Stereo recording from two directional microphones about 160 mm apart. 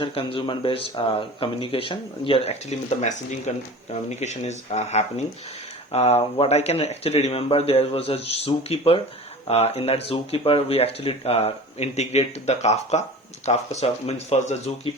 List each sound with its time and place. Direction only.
0.0 s speech: 35° left (ahead or behind)